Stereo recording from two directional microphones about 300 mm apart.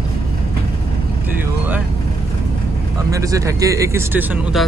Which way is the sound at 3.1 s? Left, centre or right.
Centre.